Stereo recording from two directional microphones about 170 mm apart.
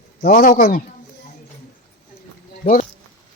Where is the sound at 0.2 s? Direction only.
60° left (ahead or behind).